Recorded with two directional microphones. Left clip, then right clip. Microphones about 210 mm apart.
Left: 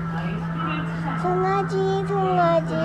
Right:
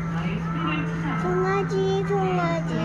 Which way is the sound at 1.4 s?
25° left (ahead or behind).